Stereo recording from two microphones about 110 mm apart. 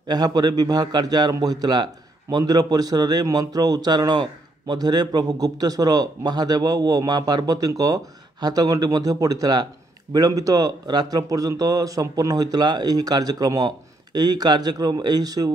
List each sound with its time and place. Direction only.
0.1 s a man's voice: 35° right (ahead or behind)